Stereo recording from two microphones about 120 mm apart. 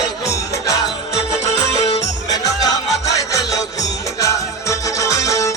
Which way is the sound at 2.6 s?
30° left (ahead or behind).